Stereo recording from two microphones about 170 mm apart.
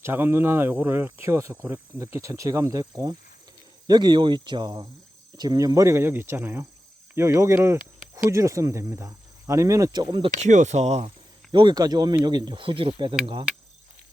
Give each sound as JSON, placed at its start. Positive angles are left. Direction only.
{"t": 0.0, "sound": "speech", "side_deg": -15}
{"t": 10.3, "sound": "speech", "side_deg": -45}
{"t": 11.5, "sound": "speech", "side_deg": -25}